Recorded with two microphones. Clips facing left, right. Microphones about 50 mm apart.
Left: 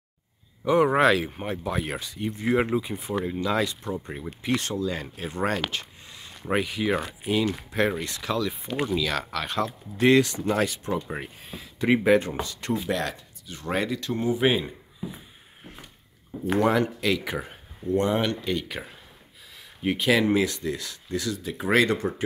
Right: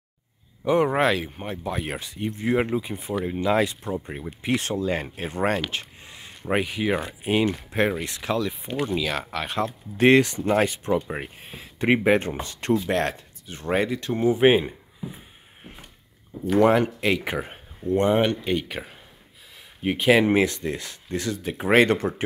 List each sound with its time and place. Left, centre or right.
0.7 s speech: centre
3.3 s speech: centre
4.0 s speech: centre; by 5.6 s right
5.7 s a sound: right
6.5 s speech: centre
7.2 s speech: right
8.0 s speech: centre
9.9 s speech: right
13.7 s speech: right
16.6 s speech: right
19.8 s speech: centre
20.1 s speech: right